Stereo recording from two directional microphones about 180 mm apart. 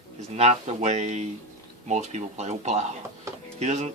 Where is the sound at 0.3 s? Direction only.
35° right (ahead or behind).